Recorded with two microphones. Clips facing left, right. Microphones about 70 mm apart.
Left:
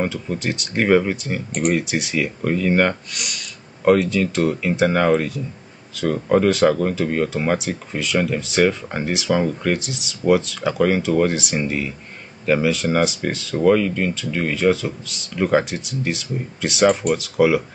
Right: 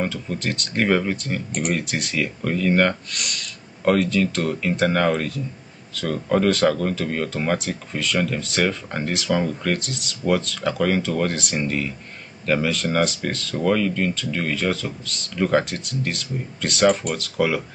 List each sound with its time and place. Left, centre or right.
0.0 s speech: centre